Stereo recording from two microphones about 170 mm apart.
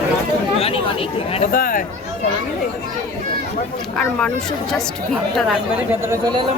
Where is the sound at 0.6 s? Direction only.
35° left (ahead or behind).